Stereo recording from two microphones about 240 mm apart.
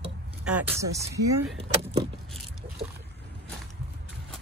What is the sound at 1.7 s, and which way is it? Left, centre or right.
Speech, right.